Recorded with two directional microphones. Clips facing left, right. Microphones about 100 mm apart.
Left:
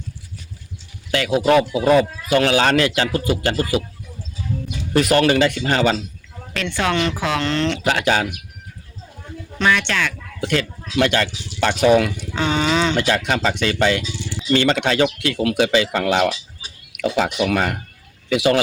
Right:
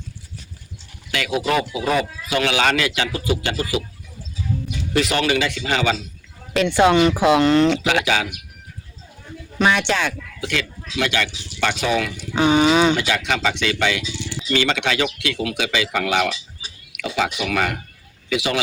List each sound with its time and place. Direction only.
1.1 s speech: 35° left (ahead or behind)
4.9 s speech: 45° left (ahead or behind)
6.5 s speech: 15° right (ahead or behind)
8.0 s speech: 40° left (ahead or behind)
9.6 s speech: 20° right (ahead or behind)
10.4 s a man's voice: 40° left (ahead or behind)
12.3 s speech: 10° right (ahead or behind)
13.0 s speech: 35° left (ahead or behind)
18.3 s speech: 40° left (ahead or behind)